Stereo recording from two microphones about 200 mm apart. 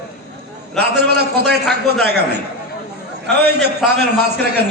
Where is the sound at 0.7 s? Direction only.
55° right (ahead or behind).